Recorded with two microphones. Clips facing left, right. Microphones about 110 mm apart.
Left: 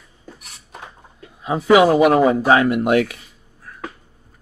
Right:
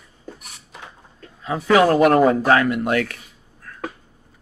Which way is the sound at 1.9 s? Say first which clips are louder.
Left 1 dB; 5° left (ahead or behind).